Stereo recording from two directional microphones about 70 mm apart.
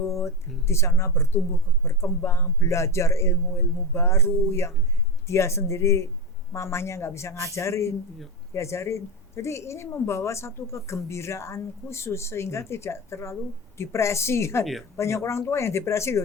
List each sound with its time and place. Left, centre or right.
0.1 s a woman's voice: left
14.6 s speech: centre
14.9 s a woman's voice: left